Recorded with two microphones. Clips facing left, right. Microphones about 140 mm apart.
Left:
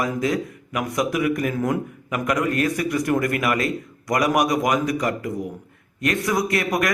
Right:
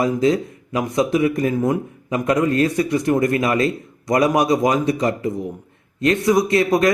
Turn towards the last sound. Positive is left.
turn(degrees=-25)  # may be behind; listen again after turning